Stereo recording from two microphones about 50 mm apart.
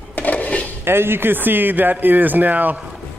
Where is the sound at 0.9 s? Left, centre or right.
Right.